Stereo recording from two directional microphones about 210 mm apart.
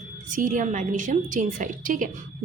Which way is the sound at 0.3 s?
40° right (ahead or behind).